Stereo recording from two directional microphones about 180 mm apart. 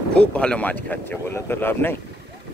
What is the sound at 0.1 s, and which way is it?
Speech, 5° left (ahead or behind).